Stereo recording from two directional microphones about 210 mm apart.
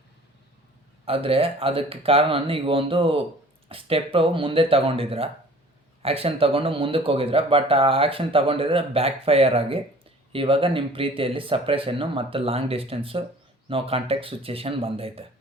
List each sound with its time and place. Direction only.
1.0 s speech: 25° right (ahead or behind)